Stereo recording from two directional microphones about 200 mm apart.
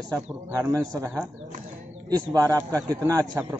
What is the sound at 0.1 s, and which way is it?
A man's voice, 15° right (ahead or behind).